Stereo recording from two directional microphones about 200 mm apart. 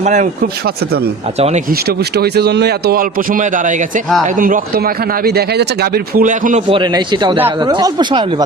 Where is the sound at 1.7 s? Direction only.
50° right (ahead or behind).